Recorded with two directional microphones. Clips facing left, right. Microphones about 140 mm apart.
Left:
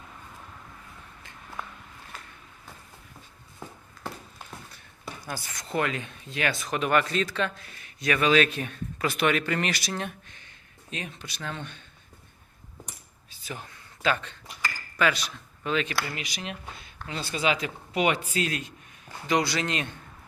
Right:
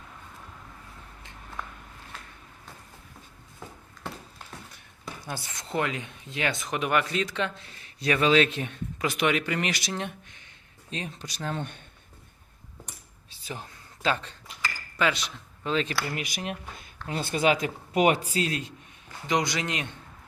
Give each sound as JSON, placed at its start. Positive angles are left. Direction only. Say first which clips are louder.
{"t": 5.1, "sound": "a sound", "louder": "even", "side_deg": 0}
{"t": 5.7, "sound": "speech", "louder": "left 1 dB", "side_deg": -20}
{"t": 10.9, "sound": "speech", "louder": "right 2 dB", "side_deg": -35}
{"t": 13.5, "sound": "a man's voice", "louder": "even", "side_deg": -30}
{"t": 16.1, "sound": "speech", "louder": "right 3 dB", "side_deg": -50}
{"t": 18.3, "sound": "speech", "louder": "right 1 dB", "side_deg": -30}
{"t": 19.3, "sound": "speech", "louder": "left 1 dB", "side_deg": -15}